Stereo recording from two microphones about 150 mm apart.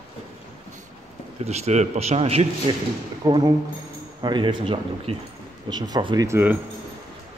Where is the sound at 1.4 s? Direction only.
45° right (ahead or behind).